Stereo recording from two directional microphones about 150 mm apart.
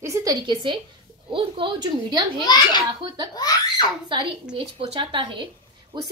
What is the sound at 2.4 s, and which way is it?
Speech, 30° left (ahead or behind).